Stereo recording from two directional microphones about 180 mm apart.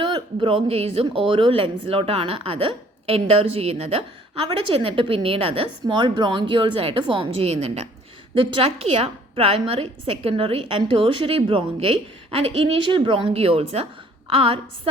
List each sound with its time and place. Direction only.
0.3 s a woman's voice: 30° right (ahead or behind)